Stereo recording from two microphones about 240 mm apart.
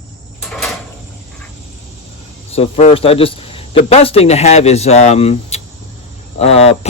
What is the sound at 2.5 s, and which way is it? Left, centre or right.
A man's voice, left.